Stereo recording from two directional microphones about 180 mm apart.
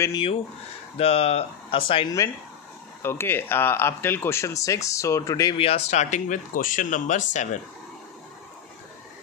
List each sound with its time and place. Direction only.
0.0 s speech: 25° left (ahead or behind)
3.0 s speech: 15° left (ahead or behind)
5.6 s speech: 35° left (ahead or behind)